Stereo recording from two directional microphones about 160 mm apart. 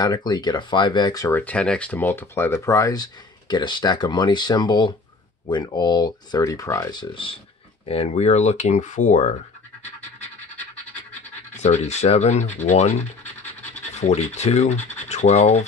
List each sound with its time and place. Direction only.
0.0 s speech: 25° left (ahead or behind)
1.4 s speech: 5° left (ahead or behind); by 9.4 s 45° left (ahead or behind)
11.5 s speech: 45° left (ahead or behind)